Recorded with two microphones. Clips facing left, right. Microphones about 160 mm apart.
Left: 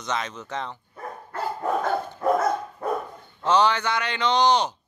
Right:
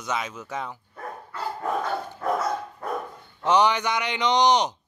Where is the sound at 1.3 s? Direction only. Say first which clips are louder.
Left 3 dB; 50° left (ahead or behind).